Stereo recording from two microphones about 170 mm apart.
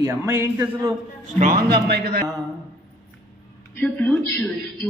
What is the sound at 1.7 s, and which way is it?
Speech, 70° right (ahead or behind).